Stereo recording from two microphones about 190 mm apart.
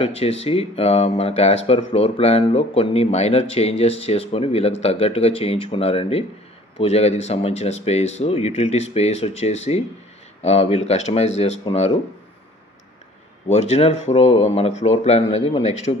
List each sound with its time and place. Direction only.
0.0 s speech: 30° left (ahead or behind)
13.5 s speech: 35° left (ahead or behind)